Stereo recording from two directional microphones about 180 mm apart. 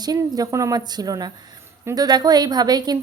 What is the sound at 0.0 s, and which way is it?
A woman's voice, 20° right (ahead or behind).